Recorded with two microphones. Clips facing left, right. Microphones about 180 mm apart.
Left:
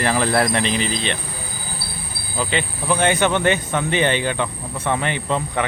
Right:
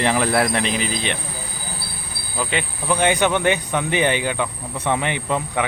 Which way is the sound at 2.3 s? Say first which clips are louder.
Left 1 dB; 10° right (ahead or behind).